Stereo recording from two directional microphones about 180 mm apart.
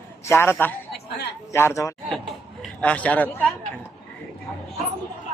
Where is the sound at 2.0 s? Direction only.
Centre (ahead or behind).